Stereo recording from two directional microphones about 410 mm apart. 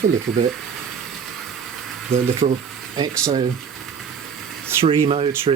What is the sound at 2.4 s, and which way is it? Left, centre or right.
Speech, centre.